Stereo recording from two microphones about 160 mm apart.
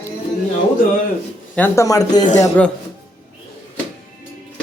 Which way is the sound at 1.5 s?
10° left (ahead or behind).